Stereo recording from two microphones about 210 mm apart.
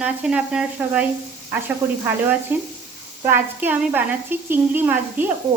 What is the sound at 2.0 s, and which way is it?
Speech, 10° right (ahead or behind).